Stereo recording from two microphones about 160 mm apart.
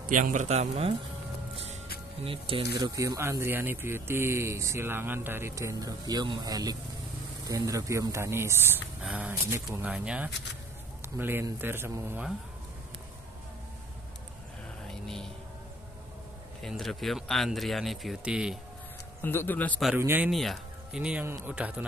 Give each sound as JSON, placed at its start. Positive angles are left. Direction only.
{"t": 0.1, "sound": "speech", "side_deg": -50}
{"t": 2.2, "sound": "speech", "side_deg": -35}
{"t": 2.8, "sound": "speech", "side_deg": -20}
{"t": 14.9, "sound": "music", "side_deg": 5}
{"t": 16.6, "sound": "speech", "side_deg": 0}
{"t": 19.2, "sound": "speech", "side_deg": 10}
{"t": 20.0, "sound": "speech", "side_deg": -15}
{"t": 20.2, "sound": "speech", "side_deg": 0}